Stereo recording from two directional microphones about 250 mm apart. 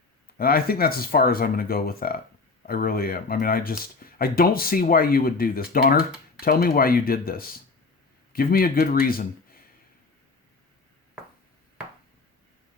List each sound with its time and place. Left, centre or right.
0.3 s speech: left